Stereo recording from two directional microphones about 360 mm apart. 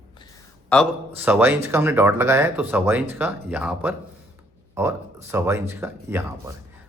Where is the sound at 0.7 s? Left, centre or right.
Centre.